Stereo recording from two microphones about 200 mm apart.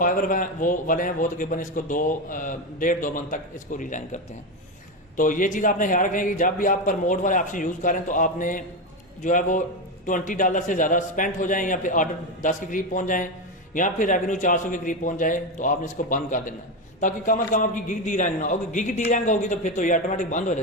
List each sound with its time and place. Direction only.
0.0 s a man's voice: 45° left (ahead or behind)